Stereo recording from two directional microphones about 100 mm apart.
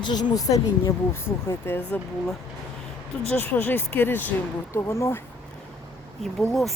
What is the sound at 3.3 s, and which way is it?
Speech, 20° left (ahead or behind).